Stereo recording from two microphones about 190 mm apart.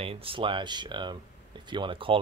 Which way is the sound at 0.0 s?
30° right (ahead or behind).